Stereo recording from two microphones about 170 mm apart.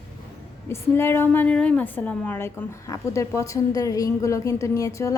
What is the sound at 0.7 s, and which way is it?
A woman's voice, 15° left (ahead or behind).